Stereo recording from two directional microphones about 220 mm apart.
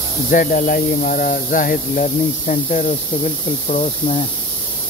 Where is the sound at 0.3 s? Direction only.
40° left (ahead or behind).